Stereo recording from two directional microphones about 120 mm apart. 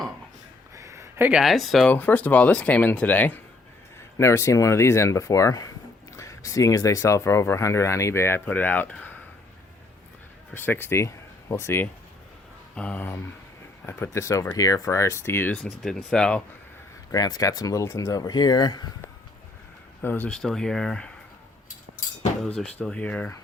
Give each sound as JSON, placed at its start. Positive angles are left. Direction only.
{"t": 0.8, "sound": "a sound", "side_deg": -25}
{"t": 1.3, "sound": "speech", "side_deg": 0}
{"t": 1.9, "sound": "speech", "side_deg": 15}
{"t": 10.5, "sound": "speech", "side_deg": 20}
{"t": 15.5, "sound": "speech", "side_deg": 5}
{"t": 17.1, "sound": "speech", "side_deg": 35}
{"t": 20.0, "sound": "speech", "side_deg": 15}
{"t": 22.5, "sound": "speech", "side_deg": 5}